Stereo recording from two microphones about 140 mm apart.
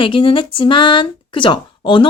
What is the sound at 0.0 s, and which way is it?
Speech, 40° left (ahead or behind).